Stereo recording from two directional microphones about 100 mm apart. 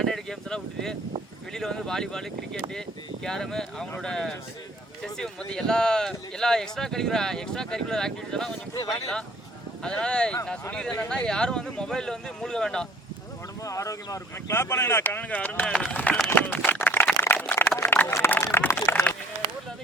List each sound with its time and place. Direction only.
0.0 s speech: 5° left (ahead or behind)
8.7 s speech: 40° left (ahead or behind)
9.8 s speech: 10° left (ahead or behind)
13.7 s speech: 35° left (ahead or behind); by 16.1 s 15° left (ahead or behind)
16.3 s a sound: 20° left (ahead or behind)